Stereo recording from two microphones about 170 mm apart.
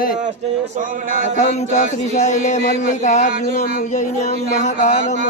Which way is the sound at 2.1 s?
45° left (ahead or behind).